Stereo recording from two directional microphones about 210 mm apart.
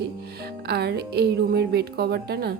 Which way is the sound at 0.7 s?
50° right (ahead or behind).